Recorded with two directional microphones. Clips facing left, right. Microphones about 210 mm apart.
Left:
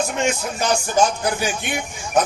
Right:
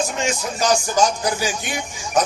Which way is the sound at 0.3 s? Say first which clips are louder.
Right 1 dB; 60° left (ahead or behind).